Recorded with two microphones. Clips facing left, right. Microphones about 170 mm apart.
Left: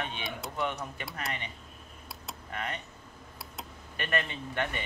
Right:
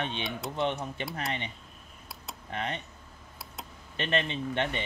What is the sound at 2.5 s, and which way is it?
Speech, 25° right (ahead or behind).